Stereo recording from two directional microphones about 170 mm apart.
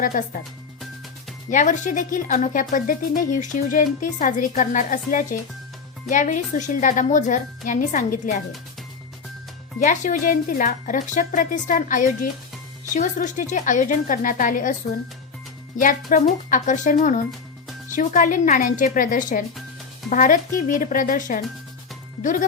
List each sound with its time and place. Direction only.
0.0 s speech: 50° left (ahead or behind)
1.5 s speech: 50° left (ahead or behind)
9.8 s speech: 45° left (ahead or behind)
15.8 s speech: 50° left (ahead or behind)